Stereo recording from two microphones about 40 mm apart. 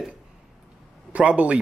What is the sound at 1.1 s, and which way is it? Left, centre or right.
Speech, right.